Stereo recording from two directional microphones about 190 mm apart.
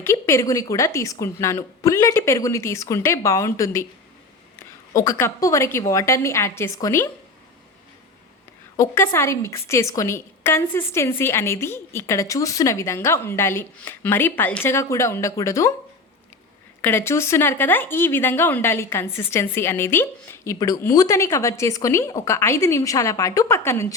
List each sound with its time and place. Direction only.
0.0 s a woman's voice: 15° left (ahead or behind)
4.9 s a woman's voice: 15° left (ahead or behind)
8.7 s a woman's voice: 15° left (ahead or behind)
16.8 s a woman's voice: 10° left (ahead or behind)